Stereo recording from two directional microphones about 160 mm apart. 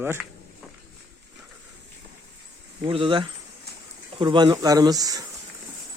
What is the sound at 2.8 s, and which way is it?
Speech, 35° right (ahead or behind).